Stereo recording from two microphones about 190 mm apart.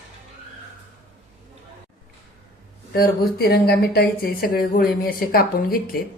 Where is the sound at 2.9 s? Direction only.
50° left (ahead or behind).